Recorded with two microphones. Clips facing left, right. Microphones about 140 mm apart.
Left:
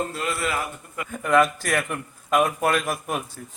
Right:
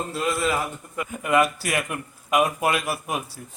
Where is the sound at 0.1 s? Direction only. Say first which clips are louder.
Right 3 dB; 15° right (ahead or behind).